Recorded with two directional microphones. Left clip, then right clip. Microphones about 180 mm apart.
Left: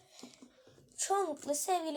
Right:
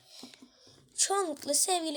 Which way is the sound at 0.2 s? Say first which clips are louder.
Right 2 dB; 10° right (ahead or behind).